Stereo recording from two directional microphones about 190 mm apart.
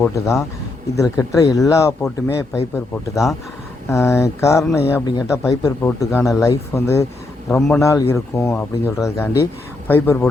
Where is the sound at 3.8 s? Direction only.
15° left (ahead or behind).